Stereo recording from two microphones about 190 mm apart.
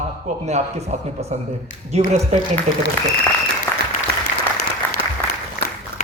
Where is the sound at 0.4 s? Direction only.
35° right (ahead or behind).